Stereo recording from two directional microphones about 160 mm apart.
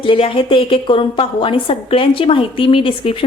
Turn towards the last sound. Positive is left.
turn(degrees=35)  # may be behind; listen again after turning